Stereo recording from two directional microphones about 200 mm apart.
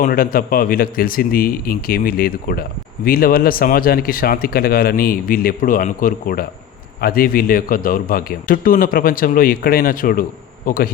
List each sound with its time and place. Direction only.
0.0 s speech: 45° left (ahead or behind)